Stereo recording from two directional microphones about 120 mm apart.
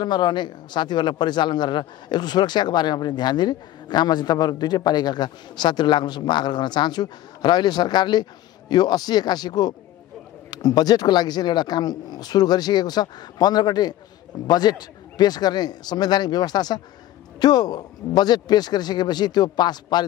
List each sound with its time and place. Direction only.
0.0 s speech: 40° left (ahead or behind)